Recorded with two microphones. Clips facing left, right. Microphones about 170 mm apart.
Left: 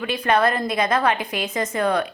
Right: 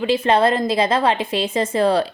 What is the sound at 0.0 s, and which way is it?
A woman's voice, 25° right (ahead or behind).